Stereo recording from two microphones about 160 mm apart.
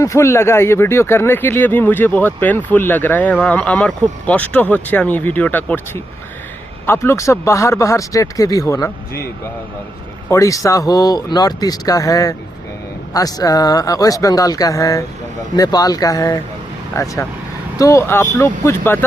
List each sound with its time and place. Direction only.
0.0 s speech: 20° left (ahead or behind)
10.2 s speech: 20° left (ahead or behind)